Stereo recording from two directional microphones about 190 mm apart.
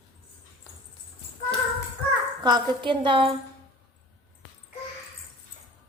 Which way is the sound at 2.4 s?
25° right (ahead or behind).